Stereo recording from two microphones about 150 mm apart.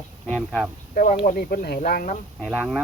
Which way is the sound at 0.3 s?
10° left (ahead or behind).